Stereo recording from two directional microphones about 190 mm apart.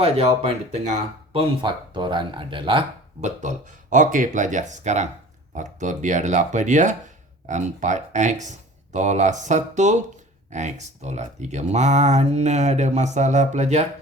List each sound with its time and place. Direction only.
0.0 s speech: 30° right (ahead or behind)